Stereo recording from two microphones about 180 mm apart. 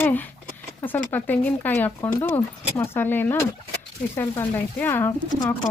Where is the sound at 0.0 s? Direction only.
10° left (ahead or behind).